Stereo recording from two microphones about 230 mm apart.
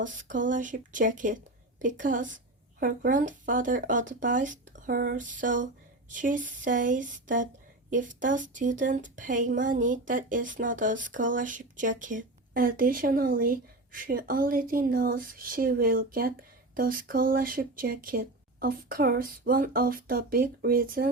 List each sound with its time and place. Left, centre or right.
0.0 s speech: right